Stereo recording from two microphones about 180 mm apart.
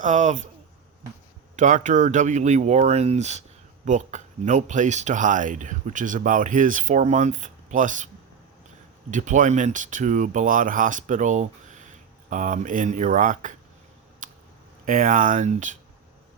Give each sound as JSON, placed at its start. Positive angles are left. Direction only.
{"t": 0.0, "sound": "speech", "side_deg": -45}
{"t": 1.5, "sound": "speech", "side_deg": -45}
{"t": 14.2, "sound": "a sound", "side_deg": -45}
{"t": 14.8, "sound": "speech", "side_deg": -50}